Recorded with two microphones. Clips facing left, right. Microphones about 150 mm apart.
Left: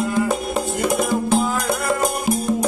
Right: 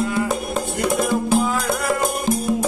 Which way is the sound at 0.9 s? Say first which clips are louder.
Right 1 dB; centre (ahead or behind).